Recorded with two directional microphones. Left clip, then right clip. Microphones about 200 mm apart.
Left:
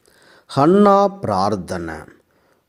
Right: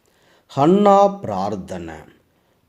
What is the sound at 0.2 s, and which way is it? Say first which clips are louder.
Speech: left 2 dB; 35° left (ahead or behind).